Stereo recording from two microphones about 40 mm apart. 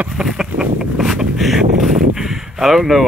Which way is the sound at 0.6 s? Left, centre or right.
Centre.